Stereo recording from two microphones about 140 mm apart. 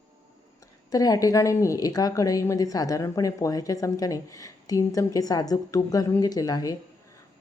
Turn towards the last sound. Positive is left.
turn(degrees=25)  # may be behind; listen again after turning